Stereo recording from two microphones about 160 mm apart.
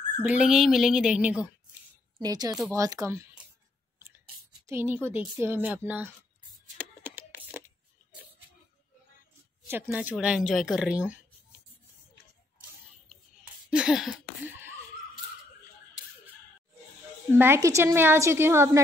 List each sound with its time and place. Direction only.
0.2 s a woman's voice: 5° right (ahead or behind)
2.2 s speech: 25° right (ahead or behind)
4.6 s a woman's voice: 15° right (ahead or behind)
6.8 s a sound: 10° right (ahead or behind)
9.7 s a woman's voice: 15° right (ahead or behind)
13.7 s a sound: 5° right (ahead or behind)
17.4 s a woman's voice: 15° right (ahead or behind)